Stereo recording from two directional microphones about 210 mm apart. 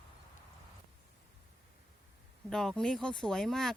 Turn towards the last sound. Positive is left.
turn(degrees=0)  # may be behind; listen again after turning